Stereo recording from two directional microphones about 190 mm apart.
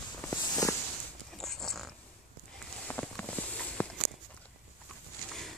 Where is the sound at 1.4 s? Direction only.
Centre (ahead or behind).